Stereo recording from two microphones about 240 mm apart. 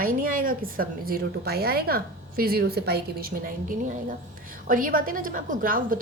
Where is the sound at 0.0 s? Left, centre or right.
Right.